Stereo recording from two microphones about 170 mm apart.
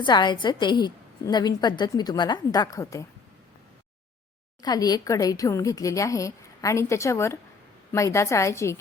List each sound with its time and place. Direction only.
0.0 s a woman's voice: 25° left (ahead or behind)
4.6 s a woman's voice: 25° left (ahead or behind)